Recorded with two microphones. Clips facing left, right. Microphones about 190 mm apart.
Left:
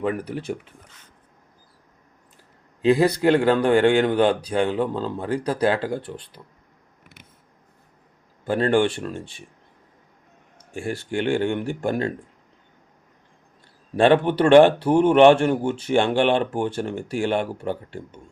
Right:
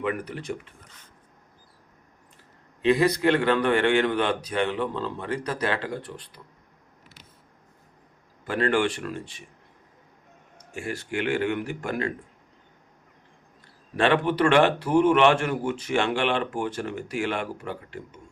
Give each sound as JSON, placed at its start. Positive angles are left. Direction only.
{"t": 0.0, "sound": "speech", "side_deg": 35}
{"t": 2.8, "sound": "speech", "side_deg": 30}
{"t": 8.4, "sound": "speech", "side_deg": 30}
{"t": 10.8, "sound": "speech", "side_deg": 30}
{"t": 13.9, "sound": "speech", "side_deg": 35}